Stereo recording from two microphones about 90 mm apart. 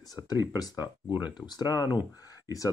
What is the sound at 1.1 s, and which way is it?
Speech, 55° left (ahead or behind).